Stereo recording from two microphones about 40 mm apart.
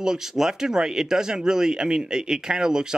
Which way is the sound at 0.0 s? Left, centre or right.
Centre.